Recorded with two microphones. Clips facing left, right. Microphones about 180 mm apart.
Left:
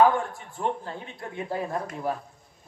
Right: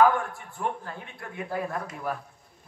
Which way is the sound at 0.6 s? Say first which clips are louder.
Left 3 dB; 30° left (ahead or behind).